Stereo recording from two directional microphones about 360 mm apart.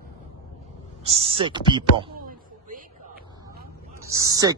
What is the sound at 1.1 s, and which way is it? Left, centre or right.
Speech, centre.